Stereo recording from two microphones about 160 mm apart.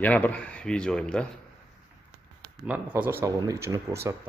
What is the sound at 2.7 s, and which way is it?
Speech, 10° right (ahead or behind).